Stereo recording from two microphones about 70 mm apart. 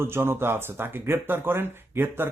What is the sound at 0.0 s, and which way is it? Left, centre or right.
Speech, right.